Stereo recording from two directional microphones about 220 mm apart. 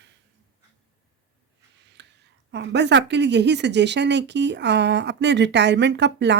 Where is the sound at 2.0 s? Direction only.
50° right (ahead or behind).